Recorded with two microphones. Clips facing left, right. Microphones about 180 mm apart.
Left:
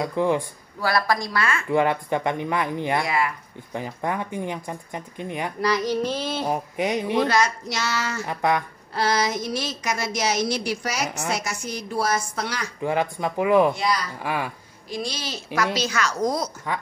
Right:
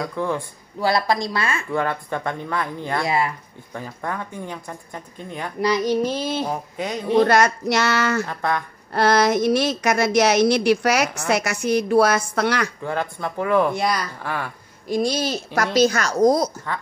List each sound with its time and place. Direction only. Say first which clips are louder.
0.0 s speech: left 3 dB; 15° left (ahead or behind)
0.7 s a woman's voice: right 3 dB; 25° right (ahead or behind)
1.7 s speech: left 6 dB; 15° left (ahead or behind)
5.6 s female singing: right 4 dB; 20° right (ahead or behind)
6.4 s speech: left 2 dB; 15° left (ahead or behind)
7.2 s a woman's voice: right 8 dB; 60° right (ahead or behind)
8.3 s speech: left 2 dB; 15° left (ahead or behind)
8.9 s a woman's voice: right 6 dB; 60° right (ahead or behind)
12.8 s speech: left 2 dB; 15° left (ahead or behind)
13.7 s a child's voice: right 2 dB; 50° right (ahead or behind)
14.2 s speech: left 1 dB; 10° left (ahead or behind)
14.9 s a child's voice: right 9 dB; 50° right (ahead or behind)